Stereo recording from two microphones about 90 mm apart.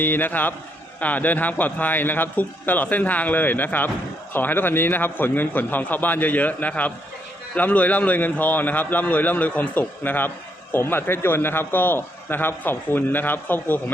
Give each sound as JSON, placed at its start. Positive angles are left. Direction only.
{"t": 0.0, "sound": "a man's voice", "side_deg": 20}